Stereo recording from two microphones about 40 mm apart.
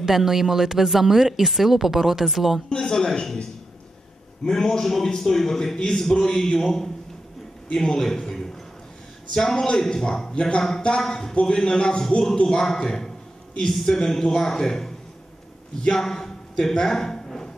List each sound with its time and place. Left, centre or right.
0.0 s speech: centre
2.7 s a man's voice: centre
4.5 s a man's voice: centre
16.0 s a sound: centre